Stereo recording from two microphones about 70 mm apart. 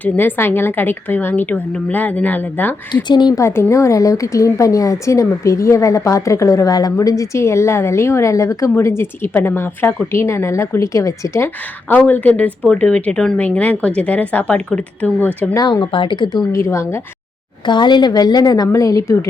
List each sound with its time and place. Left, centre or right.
0.0 s a woman's voice: left
2.9 s a woman's voice: left
3.3 s a woman's voice: left
8.7 s a woman's voice: left
11.9 s a woman's voice: left
13.4 s a woman's voice: left
15.5 s a woman's voice: left
16.5 s a woman's voice: left
17.7 s a woman's voice: left
18.7 s a woman's voice: left